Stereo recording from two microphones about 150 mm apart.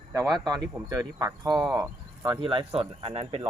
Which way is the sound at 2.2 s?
30° right (ahead or behind).